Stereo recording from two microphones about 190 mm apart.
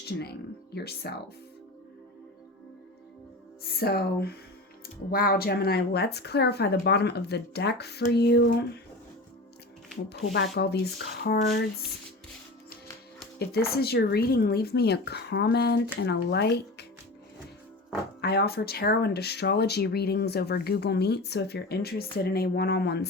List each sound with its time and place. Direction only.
0.2 s speech: 55° left (ahead or behind)
3.6 s speech: 55° left (ahead or behind)
10.1 s speech: 55° left (ahead or behind)
13.4 s speech: 55° left (ahead or behind)
18.2 s speech: 60° left (ahead or behind)